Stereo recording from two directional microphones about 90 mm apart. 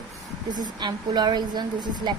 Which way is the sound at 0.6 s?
55° right (ahead or behind).